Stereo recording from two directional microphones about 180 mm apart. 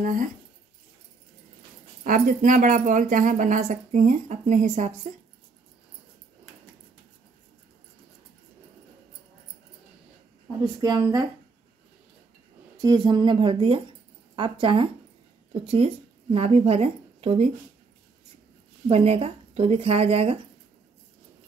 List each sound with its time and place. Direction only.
0.0 s speech: 50° right (ahead or behind)
2.0 s speech: 50° right (ahead or behind)
10.8 s speech: 25° right (ahead or behind)
12.8 s speech: 25° right (ahead or behind)
18.9 s speech: 35° right (ahead or behind)